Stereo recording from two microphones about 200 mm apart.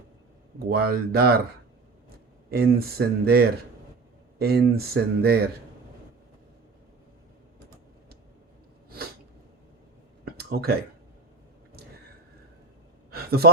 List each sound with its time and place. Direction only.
0.6 s speech: 50° right (ahead or behind)
2.5 s speech: 50° right (ahead or behind)
10.3 s speech: 50° right (ahead or behind)
13.1 s a sound: 50° right (ahead or behind)